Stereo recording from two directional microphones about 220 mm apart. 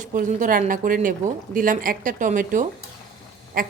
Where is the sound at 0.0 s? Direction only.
35° right (ahead or behind).